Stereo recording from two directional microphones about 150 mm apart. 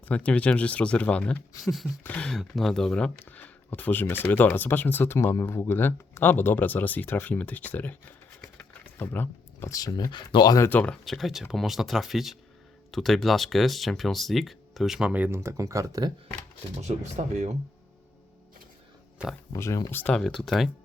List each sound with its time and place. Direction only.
0.1 s speech: 10° left (ahead or behind); by 10.7 s 25° left (ahead or behind)
10.7 s speech: 10° left (ahead or behind); by 16.1 s 25° right (ahead or behind)
16.8 s speech: 50° right (ahead or behind)
19.5 s speech: 20° left (ahead or behind); by 20.7 s centre (ahead or behind)